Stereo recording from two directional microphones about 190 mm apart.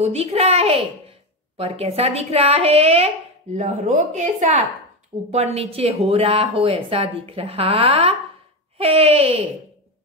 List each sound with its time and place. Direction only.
0.0 s speech: 30° right (ahead or behind)